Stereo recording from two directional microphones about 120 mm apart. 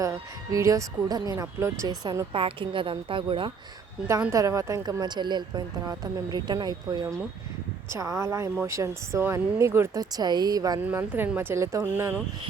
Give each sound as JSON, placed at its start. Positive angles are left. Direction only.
{"t": 0.0, "sound": "speech", "side_deg": -25}
{"t": 2.3, "sound": "a woman's voice", "side_deg": -45}
{"t": 4.0, "sound": "a woman's voice", "side_deg": -20}
{"t": 10.8, "sound": "speech", "side_deg": -15}